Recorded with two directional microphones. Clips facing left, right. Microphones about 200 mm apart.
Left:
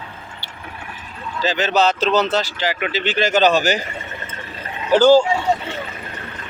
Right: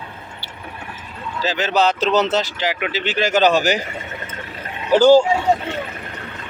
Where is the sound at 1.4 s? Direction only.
10° right (ahead or behind).